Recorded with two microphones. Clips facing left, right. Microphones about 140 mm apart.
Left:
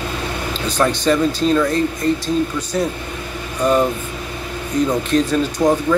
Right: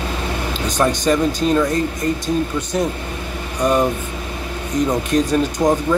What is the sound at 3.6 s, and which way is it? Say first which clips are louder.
Speech: left 1 dB; 15° right (ahead or behind).